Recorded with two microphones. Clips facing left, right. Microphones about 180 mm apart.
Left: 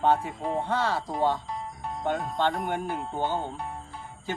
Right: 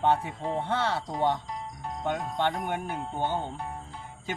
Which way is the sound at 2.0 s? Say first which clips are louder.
Left 2 dB; 20° right (ahead or behind).